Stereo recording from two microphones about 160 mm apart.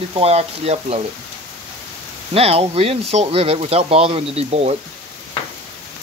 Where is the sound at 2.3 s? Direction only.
40° right (ahead or behind).